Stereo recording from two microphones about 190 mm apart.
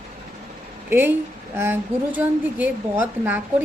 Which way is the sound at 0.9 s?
10° right (ahead or behind).